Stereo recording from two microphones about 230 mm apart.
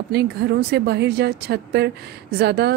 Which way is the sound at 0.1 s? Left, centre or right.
Right.